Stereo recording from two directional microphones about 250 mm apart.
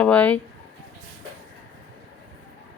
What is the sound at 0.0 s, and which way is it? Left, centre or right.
Speech, centre.